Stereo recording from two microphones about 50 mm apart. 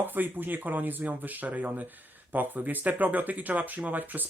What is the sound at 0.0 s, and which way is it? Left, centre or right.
Speech, right.